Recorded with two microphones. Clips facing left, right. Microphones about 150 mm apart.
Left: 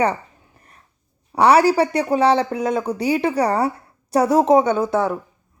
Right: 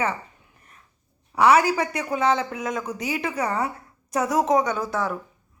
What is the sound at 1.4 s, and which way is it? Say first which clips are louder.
Speech: left 4 dB; 35° left (ahead or behind).